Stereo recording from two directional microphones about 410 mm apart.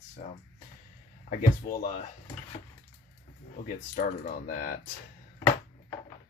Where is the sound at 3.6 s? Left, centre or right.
Centre.